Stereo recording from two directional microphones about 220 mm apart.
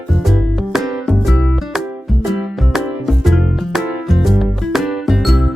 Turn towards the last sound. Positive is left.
turn(degrees=0)  # may be behind; listen again after turning